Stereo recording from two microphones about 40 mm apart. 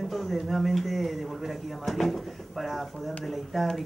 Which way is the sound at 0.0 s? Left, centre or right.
Centre.